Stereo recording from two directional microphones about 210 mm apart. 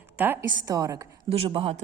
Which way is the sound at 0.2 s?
15° right (ahead or behind).